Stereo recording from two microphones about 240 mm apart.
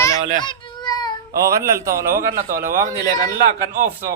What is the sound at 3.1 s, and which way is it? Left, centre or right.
Speech, centre.